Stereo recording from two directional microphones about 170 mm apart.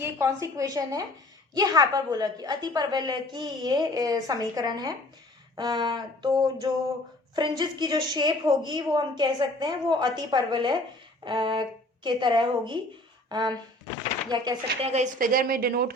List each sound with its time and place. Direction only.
0.0 s a woman's voice: 15° right (ahead or behind)
7.3 s a woman's voice: 25° right (ahead or behind)
14.8 s a woman's voice: 45° right (ahead or behind); by 15.9 s 60° right (ahead or behind)